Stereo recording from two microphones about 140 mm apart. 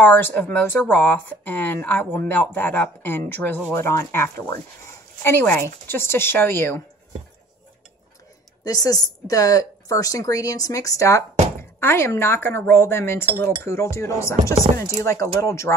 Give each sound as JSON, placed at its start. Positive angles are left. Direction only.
{"t": 0.0, "sound": "a woman's voice", "side_deg": 15}
{"t": 8.6, "sound": "a woman's voice", "side_deg": 25}